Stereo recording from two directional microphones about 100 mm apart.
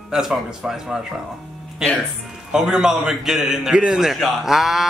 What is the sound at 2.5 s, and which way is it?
A man's voice, 5° right (ahead or behind).